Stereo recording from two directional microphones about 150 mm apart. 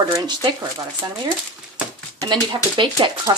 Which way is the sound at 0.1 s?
25° right (ahead or behind).